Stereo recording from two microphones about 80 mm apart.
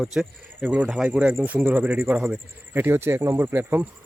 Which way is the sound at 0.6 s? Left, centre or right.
Centre.